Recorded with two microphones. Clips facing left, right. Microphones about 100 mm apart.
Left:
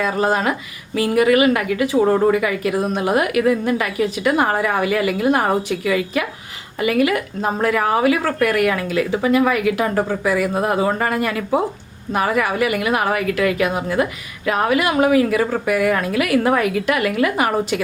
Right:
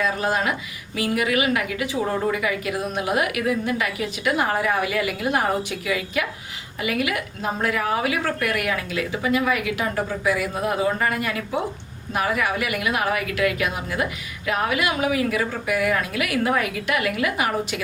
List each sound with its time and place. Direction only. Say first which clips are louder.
0.2 s a woman's voice: left 5 dB; 40° left (ahead or behind)